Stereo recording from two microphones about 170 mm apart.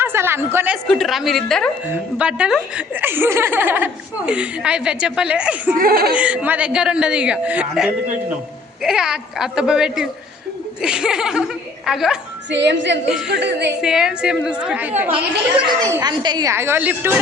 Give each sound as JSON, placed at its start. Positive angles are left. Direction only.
{"t": 0.0, "sound": "a woman's voice", "side_deg": -15}
{"t": 0.9, "sound": "a woman's voice", "side_deg": 0}
{"t": 5.7, "sound": "speech", "side_deg": -60}
{"t": 6.1, "sound": "a woman's voice", "side_deg": -10}
{"t": 12.5, "sound": "a woman's voice", "side_deg": -90}
{"t": 13.1, "sound": "a woman's voice", "side_deg": -5}
{"t": 13.3, "sound": "a woman's voice", "side_deg": -90}
{"t": 13.8, "sound": "a woman's voice", "side_deg": -5}